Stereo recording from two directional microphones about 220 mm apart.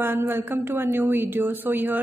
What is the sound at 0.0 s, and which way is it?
A woman's voice, 10° right (ahead or behind).